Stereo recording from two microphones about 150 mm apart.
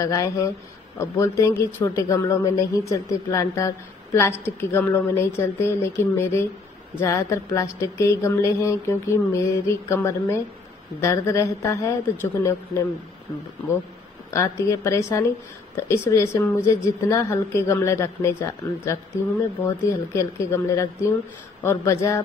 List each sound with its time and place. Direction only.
0.0 s a woman's voice: 20° left (ahead or behind)
14.3 s speech: 20° left (ahead or behind)
20.1 s speech: 20° left (ahead or behind)